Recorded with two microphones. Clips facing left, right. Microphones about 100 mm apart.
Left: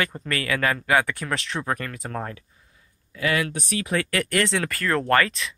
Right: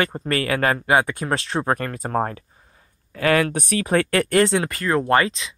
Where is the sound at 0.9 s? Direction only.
20° right (ahead or behind); by 3.8 s 55° right (ahead or behind).